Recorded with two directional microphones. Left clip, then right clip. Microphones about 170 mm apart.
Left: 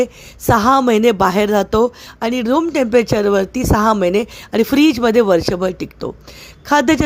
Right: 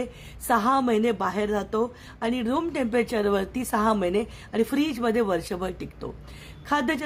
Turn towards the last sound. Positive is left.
turn(degrees=40)  # may be behind; listen again after turning